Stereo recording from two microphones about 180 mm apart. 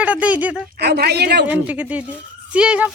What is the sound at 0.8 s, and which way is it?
Speech, 65° right (ahead or behind).